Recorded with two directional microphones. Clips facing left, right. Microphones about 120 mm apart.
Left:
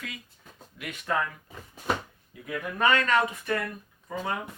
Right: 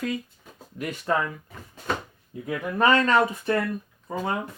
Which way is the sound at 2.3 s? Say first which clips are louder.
Right 5 dB; 35° right (ahead or behind).